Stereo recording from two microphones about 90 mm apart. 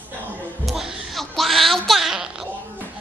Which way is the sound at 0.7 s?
Centre (ahead or behind).